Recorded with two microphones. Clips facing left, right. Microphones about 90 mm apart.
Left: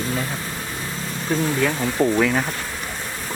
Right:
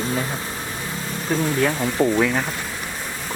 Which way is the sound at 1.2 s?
10° right (ahead or behind).